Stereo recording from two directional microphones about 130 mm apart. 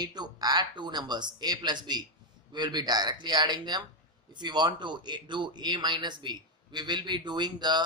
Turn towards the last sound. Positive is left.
turn(degrees=-35)  # may be behind; listen again after turning